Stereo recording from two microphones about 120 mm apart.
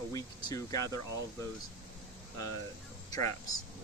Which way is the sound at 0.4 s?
30° left (ahead or behind).